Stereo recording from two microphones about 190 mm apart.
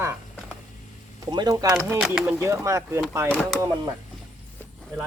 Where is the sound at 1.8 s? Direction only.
5° right (ahead or behind).